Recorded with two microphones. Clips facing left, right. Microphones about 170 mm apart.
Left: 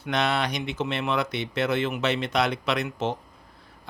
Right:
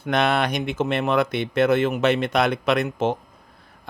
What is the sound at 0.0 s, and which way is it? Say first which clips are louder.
Speech: right 5 dB; 50° right (ahead or behind).